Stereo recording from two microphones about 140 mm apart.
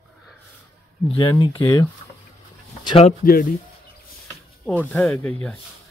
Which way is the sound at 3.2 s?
80° left.